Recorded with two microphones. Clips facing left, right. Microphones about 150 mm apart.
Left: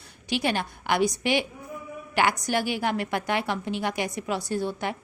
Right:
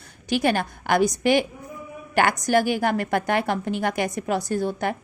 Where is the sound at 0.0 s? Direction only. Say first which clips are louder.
Right 5 dB; 45° right (ahead or behind).